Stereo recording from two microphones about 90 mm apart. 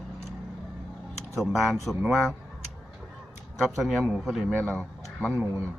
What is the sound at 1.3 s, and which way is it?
Speech, centre (ahead or behind).